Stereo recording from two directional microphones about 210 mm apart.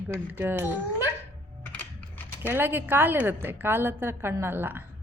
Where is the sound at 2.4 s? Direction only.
10° right (ahead or behind).